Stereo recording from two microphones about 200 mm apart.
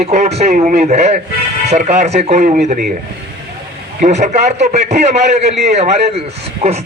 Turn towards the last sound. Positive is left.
turn(degrees=-30)  # may be behind; listen again after turning